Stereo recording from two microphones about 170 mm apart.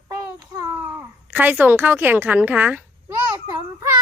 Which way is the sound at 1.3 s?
10° right (ahead or behind).